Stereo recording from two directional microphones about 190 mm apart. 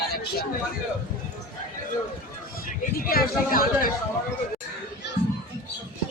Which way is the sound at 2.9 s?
50° left (ahead or behind).